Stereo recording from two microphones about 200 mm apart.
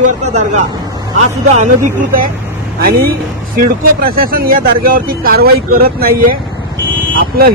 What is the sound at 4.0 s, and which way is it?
Speech, 45° right (ahead or behind).